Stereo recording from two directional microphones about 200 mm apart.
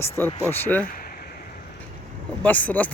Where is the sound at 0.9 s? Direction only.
45° left (ahead or behind).